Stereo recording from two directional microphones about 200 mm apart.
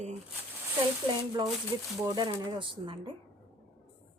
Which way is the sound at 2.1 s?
20° right (ahead or behind).